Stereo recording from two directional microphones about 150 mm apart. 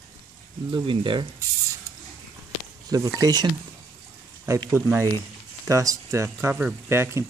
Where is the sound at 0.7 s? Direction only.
35° right (ahead or behind).